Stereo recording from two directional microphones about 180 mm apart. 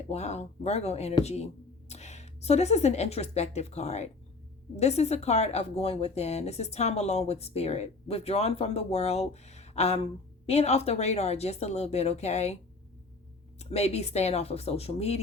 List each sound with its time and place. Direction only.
0.0 s a woman's voice: 35° left (ahead or behind)
13.6 s speech: 35° left (ahead or behind)